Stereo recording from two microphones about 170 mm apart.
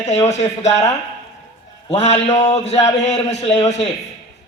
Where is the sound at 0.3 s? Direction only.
40° left (ahead or behind).